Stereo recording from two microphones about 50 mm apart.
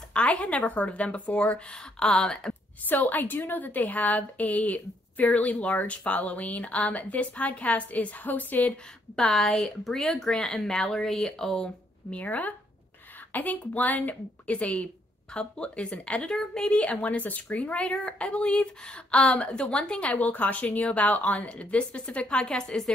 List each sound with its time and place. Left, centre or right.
0.1 s a woman's voice: left
2.0 s speech: centre
2.9 s a woman's voice: left
9.1 s speech: centre
12.2 s a woman's voice: left
16.2 s a woman's voice: centre